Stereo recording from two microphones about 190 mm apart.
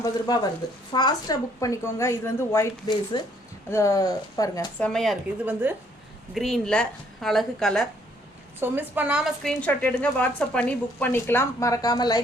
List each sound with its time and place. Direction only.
0.0 s a woman's voice: 20° left (ahead or behind)
4.8 s a woman's voice: centre (ahead or behind)
5.5 s a woman's voice: 10° right (ahead or behind)
6.3 s a woman's voice: centre (ahead or behind)
8.5 s a woman's voice: 10° right (ahead or behind); by 12.2 s 20° left (ahead or behind)